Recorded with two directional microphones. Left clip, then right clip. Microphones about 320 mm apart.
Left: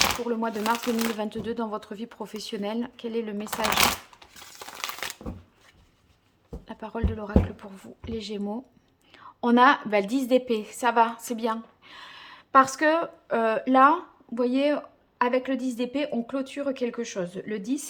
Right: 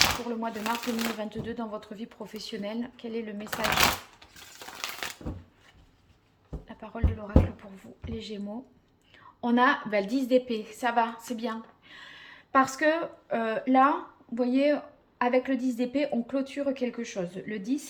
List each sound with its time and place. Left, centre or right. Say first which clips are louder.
0.0 s speech: left 1 dB; centre
4.8 s a sound: left 2 dB; centre
6.7 s a woman's voice: left 5 dB; centre